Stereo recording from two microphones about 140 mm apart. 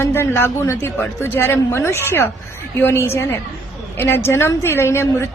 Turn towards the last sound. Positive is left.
turn(degrees=20)  # may be behind; listen again after turning